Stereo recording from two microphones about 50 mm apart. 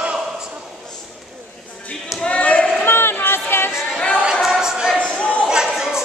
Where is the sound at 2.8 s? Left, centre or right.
Left.